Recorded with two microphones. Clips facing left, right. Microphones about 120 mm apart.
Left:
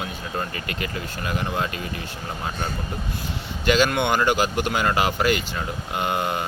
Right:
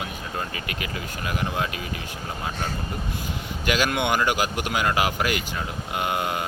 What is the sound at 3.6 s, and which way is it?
Speech, 5° right (ahead or behind).